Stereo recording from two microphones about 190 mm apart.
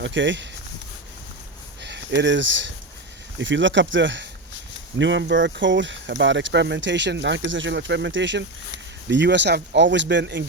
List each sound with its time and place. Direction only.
0.0 s speech: 70° right (ahead or behind)
1.8 s speech: 65° right (ahead or behind)